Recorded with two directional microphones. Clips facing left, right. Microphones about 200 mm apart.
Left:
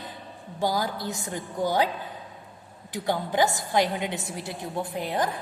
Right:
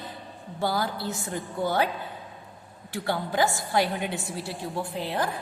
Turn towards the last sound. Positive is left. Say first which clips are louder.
# left 1 dB
turn(degrees=15)  # may be behind; listen again after turning